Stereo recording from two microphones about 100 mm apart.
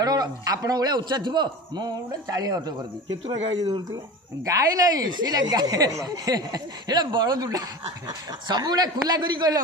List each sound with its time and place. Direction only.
0.0 s a man's voice: 40° right (ahead or behind)